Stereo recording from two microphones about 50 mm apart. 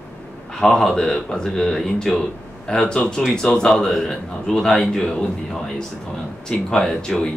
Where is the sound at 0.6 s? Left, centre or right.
Centre.